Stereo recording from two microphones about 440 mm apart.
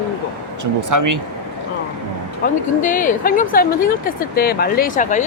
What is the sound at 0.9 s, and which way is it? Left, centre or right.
Speech, right.